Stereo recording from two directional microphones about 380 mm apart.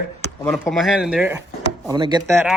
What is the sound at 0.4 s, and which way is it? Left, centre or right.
Speech, centre.